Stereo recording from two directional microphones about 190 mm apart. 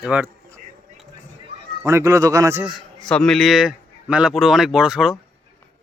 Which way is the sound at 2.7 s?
Centre (ahead or behind).